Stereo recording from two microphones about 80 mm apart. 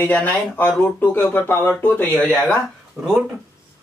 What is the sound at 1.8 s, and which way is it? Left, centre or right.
Speech, centre.